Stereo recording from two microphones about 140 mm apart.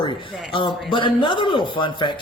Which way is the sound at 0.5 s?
35° left (ahead or behind).